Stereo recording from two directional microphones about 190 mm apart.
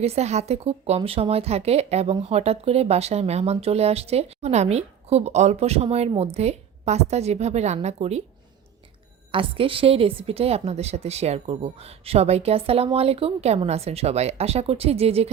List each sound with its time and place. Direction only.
0.0 s speech: 35° right (ahead or behind)
9.3 s speech: 30° right (ahead or behind)